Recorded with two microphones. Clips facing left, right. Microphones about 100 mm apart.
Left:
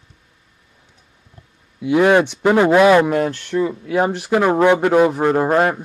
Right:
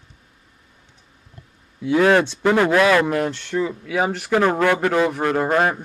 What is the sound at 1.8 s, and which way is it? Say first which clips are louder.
A man's voice: left 2 dB; 15° left (ahead or behind).